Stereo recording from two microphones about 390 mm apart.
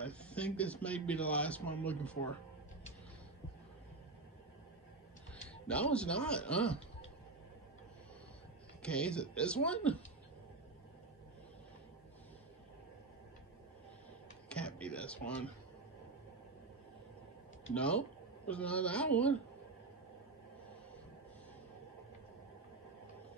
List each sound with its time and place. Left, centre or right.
0.0 s a man's voice: centre
5.5 s a man's voice: centre
8.8 s a man's voice: centre
14.5 s a sound: centre
17.7 s a man's voice: centre